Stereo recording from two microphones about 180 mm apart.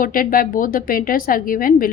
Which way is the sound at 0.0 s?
50° left (ahead or behind).